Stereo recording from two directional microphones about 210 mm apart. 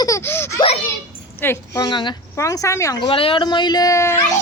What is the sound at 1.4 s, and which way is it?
A woman's voice, 10° left (ahead or behind).